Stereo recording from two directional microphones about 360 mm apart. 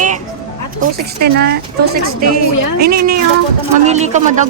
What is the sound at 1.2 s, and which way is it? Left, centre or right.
Speech, right.